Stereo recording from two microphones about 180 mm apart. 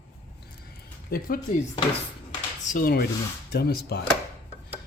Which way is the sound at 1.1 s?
55° left (ahead or behind).